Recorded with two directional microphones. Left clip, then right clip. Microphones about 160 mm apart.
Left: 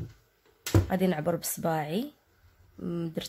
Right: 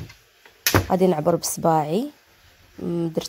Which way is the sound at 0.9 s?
35° right (ahead or behind).